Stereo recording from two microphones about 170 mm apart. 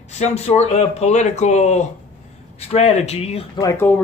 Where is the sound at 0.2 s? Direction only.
40° left (ahead or behind).